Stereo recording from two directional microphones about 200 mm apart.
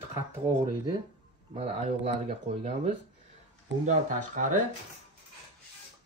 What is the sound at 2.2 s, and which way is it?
Speech, 35° right (ahead or behind).